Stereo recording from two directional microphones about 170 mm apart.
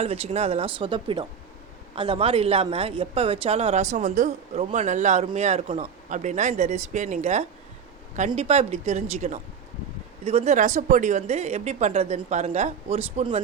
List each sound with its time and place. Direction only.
0.0 s speech: 35° right (ahead or behind)